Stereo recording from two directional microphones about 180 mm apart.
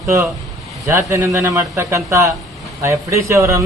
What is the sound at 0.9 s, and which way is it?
Speech, 15° right (ahead or behind).